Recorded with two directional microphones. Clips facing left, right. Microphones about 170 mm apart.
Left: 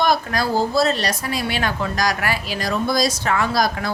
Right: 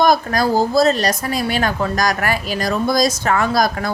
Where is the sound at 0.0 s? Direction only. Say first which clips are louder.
Right 4 dB; 45° right (ahead or behind).